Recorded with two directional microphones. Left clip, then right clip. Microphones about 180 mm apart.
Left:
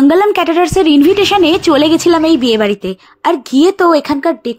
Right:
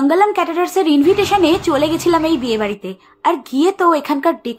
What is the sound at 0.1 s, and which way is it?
A woman's voice, 55° left (ahead or behind).